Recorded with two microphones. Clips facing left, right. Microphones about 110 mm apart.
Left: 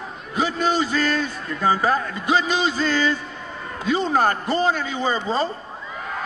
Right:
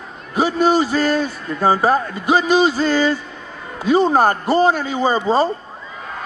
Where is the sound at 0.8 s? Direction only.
35° right (ahead or behind).